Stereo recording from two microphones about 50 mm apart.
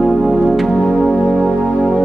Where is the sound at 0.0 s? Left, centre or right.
Centre.